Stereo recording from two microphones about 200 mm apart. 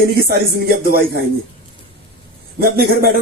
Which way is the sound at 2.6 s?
50° right (ahead or behind).